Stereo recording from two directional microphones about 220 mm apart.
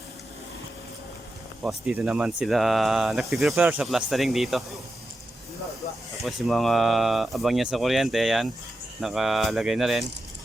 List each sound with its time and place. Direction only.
1.6 s speech: 5° right (ahead or behind)
6.2 s speech: centre (ahead or behind)